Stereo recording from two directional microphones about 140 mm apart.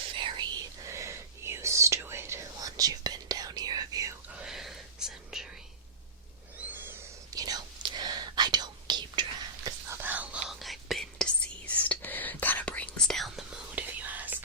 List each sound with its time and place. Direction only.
0.1 s whispering: 35° right (ahead or behind)
0.9 s whispering: 20° right (ahead or behind)
4.3 s whispering: 5° right (ahead or behind)
7.3 s whispering: 30° right (ahead or behind)
9.6 s whispering: 15° right (ahead or behind)
10.5 s whispering: centre (ahead or behind)
13.7 s whispering: 10° right (ahead or behind)